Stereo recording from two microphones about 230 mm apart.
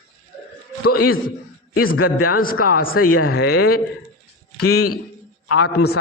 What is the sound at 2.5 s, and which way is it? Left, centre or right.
A man's voice, left.